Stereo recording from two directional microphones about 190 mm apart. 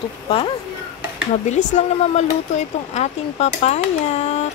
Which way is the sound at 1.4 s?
40° left (ahead or behind).